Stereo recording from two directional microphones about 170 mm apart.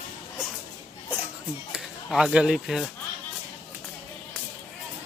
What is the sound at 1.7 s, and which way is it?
Speech, 5° right (ahead or behind).